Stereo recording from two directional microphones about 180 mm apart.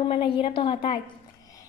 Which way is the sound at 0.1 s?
30° left (ahead or behind).